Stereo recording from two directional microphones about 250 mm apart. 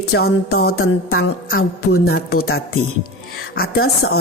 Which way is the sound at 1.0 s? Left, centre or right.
Left.